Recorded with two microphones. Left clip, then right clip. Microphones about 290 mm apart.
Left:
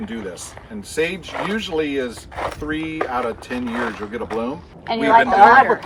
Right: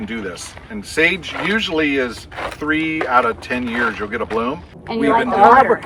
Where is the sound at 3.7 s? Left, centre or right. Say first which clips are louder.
Right 5 dB; left.